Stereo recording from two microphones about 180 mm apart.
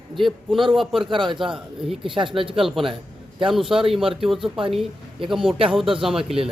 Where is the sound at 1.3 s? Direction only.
Centre (ahead or behind).